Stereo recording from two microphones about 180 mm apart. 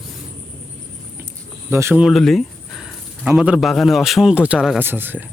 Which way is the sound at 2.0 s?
Centre (ahead or behind).